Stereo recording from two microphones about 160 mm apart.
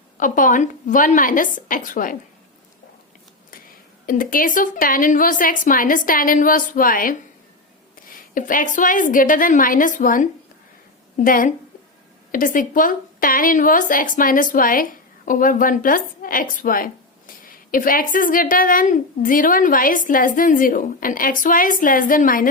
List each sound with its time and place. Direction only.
0.2 s a woman's voice: 55° left (ahead or behind)
4.0 s a woman's voice: 60° left (ahead or behind)
8.4 s a woman's voice: 55° left (ahead or behind)